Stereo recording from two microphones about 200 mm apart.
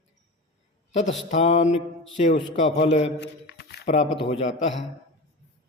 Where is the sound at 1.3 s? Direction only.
35° left (ahead or behind).